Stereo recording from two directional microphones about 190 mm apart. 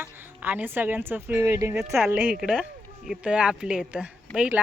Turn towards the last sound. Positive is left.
turn(degrees=-5)  # may be behind; listen again after turning